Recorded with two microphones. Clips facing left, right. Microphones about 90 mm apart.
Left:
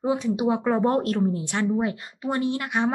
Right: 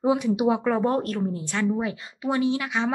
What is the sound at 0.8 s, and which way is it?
Speech, 25° left (ahead or behind).